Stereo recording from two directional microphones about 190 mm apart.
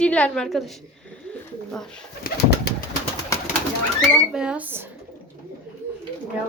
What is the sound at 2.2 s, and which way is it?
Bird, 55° left (ahead or behind).